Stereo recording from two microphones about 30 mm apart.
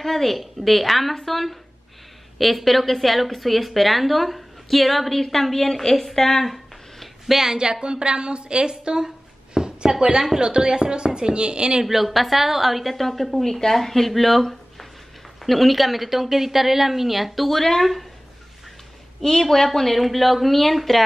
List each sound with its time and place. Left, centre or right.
0.0 s a woman's voice: centre
6.4 s a sound: centre
7.5 s a woman's voice: right
11.8 s a woman's voice: centre
17.5 s speech: centre
19.4 s speech: centre